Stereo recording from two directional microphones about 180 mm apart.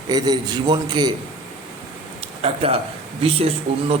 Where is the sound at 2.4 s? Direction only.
35° right (ahead or behind).